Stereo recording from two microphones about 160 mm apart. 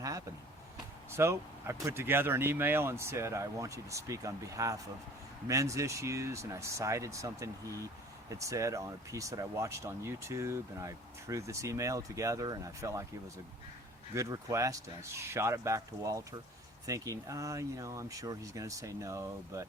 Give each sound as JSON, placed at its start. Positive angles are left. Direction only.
{"t": 1.1, "sound": "speech", "side_deg": -15}